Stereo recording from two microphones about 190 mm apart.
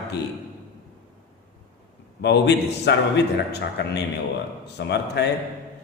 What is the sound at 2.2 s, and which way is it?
A man's voice, 65° left (ahead or behind).